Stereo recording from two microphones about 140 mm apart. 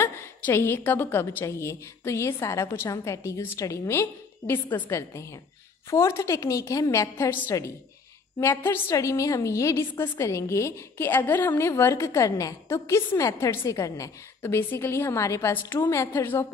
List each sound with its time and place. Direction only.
0.0 s a woman's voice: 15° left (ahead or behind)